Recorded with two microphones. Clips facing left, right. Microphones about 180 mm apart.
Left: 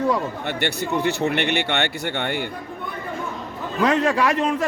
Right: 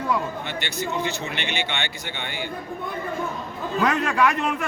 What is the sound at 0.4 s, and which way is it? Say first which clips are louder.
Speech: left 4 dB; 60° left (ahead or behind).